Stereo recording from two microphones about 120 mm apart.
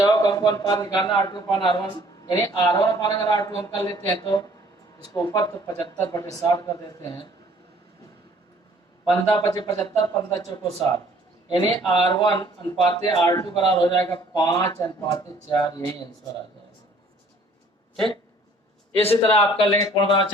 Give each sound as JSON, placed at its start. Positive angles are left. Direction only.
{"t": 0.0, "sound": "a man's voice", "side_deg": 35}
{"t": 9.3, "sound": "a man's voice", "side_deg": 40}
{"t": 19.1, "sound": "a man's voice", "side_deg": 50}
{"t": 19.8, "sound": "a man's voice", "side_deg": 40}